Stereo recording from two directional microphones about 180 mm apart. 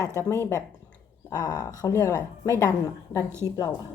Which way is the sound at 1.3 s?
20° left (ahead or behind).